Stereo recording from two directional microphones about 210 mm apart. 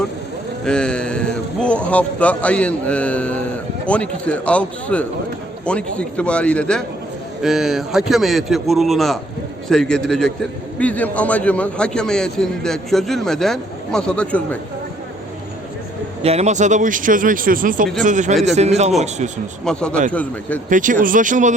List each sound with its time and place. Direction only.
0.6 s a man's voice: 5° left (ahead or behind)
16.2 s speech: 30° right (ahead or behind)
19.6 s a man's voice: 5° left (ahead or behind)
20.7 s speech: 40° right (ahead or behind)